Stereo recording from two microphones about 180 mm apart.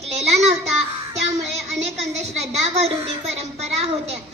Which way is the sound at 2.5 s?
35° right (ahead or behind).